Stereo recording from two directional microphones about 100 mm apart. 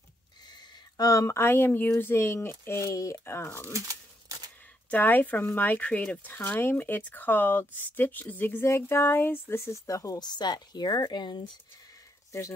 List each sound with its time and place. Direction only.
0.9 s speech: 35° left (ahead or behind)
4.9 s speech: 15° left (ahead or behind); by 11.4 s 50° left (ahead or behind)
12.3 s speech: 30° left (ahead or behind)